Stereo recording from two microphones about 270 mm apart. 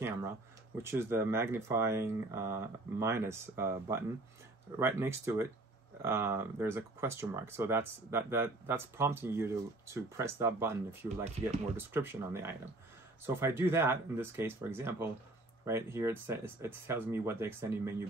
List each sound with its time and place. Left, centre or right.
0.8 s speech: centre